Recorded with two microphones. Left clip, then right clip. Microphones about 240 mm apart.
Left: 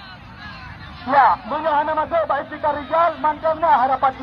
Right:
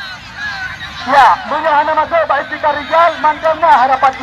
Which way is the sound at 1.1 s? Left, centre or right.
Right.